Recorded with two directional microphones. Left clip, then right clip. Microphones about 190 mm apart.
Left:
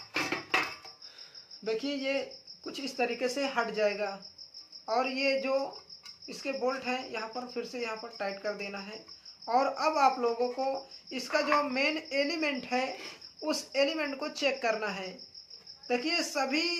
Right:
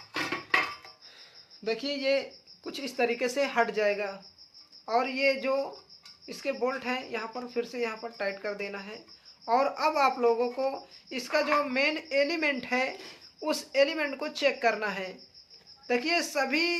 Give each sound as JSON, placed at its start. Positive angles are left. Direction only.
{"t": 0.1, "sound": "music", "side_deg": -5}
{"t": 1.6, "sound": "speech", "side_deg": -40}